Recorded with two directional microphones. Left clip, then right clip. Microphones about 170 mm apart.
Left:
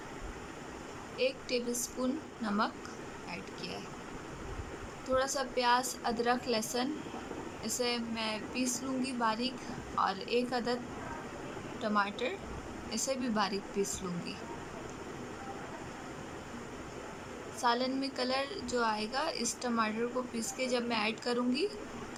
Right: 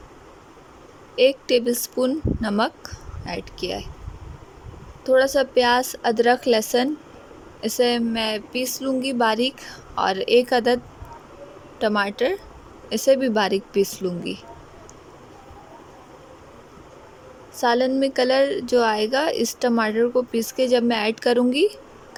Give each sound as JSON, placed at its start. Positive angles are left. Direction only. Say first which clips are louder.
{"t": 1.1, "sound": "speech", "louder": "right 16 dB", "side_deg": -60}
{"t": 5.0, "sound": "a woman's voice", "louder": "right 15 dB", "side_deg": -55}
{"t": 11.8, "sound": "a woman's voice", "louder": "right 12 dB", "side_deg": -60}
{"t": 17.6, "sound": "a woman's voice", "louder": "right 12 dB", "side_deg": -50}